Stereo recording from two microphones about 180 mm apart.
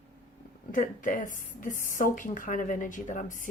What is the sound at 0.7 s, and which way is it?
Speech, 50° left (ahead or behind).